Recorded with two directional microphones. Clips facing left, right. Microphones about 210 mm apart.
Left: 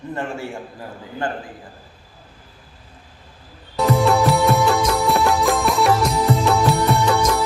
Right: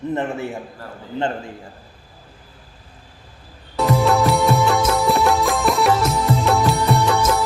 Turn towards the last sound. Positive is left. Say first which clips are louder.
# even
turn(degrees=0)  # may be behind; listen again after turning